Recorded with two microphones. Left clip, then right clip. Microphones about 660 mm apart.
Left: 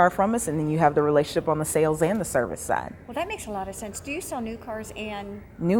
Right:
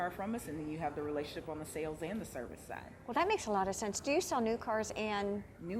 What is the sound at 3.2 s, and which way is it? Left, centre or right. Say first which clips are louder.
A woman's voice: left 2 dB; right.